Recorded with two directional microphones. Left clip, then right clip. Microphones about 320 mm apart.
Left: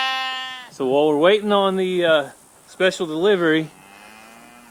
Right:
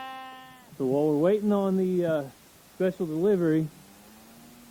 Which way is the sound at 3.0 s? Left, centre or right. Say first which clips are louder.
Left 6 dB; left.